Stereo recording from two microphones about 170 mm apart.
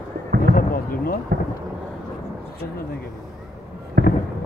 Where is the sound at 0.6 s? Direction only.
60° left (ahead or behind).